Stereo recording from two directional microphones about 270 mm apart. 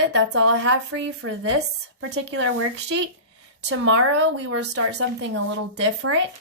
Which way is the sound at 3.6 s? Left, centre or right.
Right.